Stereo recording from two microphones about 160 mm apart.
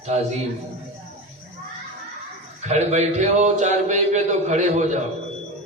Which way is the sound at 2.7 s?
45° right (ahead or behind).